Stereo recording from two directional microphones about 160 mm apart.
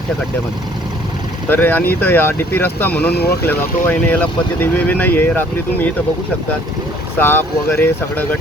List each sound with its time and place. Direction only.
1.5 s speech: 10° left (ahead or behind)
3.1 s speech: 90° left
3.4 s speech: 10° left (ahead or behind)
7.2 s speech: 15° left (ahead or behind)